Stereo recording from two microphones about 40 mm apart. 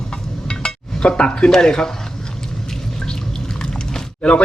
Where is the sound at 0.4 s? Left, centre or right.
Left.